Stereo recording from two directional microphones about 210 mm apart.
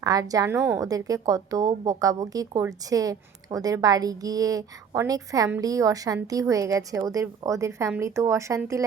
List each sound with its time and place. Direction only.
0.0 s a woman's voice: 15° right (ahead or behind)